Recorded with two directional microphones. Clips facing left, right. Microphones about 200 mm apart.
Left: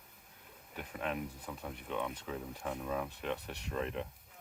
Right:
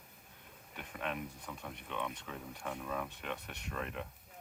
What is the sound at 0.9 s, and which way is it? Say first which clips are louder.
Speech: left 2 dB; 30° left (ahead or behind).